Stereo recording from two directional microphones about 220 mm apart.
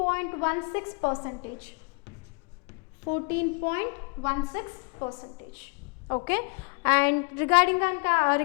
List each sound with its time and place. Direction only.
0.0 s a woman's voice: 15° left (ahead or behind)
3.1 s a woman's voice: 15° left (ahead or behind)